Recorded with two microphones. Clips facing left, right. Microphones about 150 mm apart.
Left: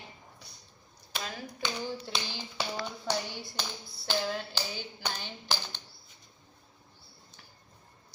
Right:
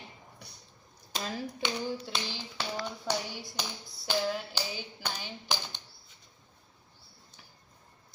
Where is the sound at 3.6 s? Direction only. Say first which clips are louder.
Right 1 dB; 10° right (ahead or behind).